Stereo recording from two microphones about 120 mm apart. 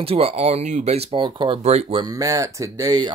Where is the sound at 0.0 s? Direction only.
55° right (ahead or behind); by 1.0 s 70° right (ahead or behind).